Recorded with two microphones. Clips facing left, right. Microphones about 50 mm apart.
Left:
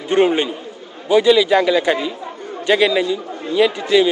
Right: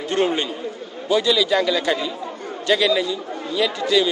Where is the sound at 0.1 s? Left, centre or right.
Left.